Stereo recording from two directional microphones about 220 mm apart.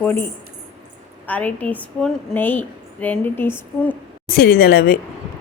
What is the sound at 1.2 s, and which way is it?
A woman's voice, 5° left (ahead or behind).